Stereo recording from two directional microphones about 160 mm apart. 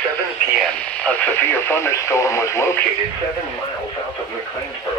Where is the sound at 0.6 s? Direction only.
5° left (ahead or behind).